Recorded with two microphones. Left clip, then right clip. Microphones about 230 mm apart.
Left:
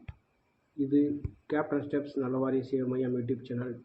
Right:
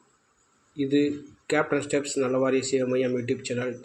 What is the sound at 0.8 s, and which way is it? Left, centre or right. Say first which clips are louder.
Speech: right 4 dB; right.